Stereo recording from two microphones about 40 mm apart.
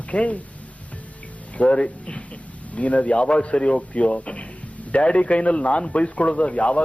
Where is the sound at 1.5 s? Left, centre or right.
Left.